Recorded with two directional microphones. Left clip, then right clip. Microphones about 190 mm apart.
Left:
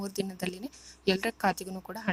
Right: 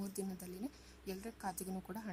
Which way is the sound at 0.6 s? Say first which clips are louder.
Left 19 dB; centre (ahead or behind).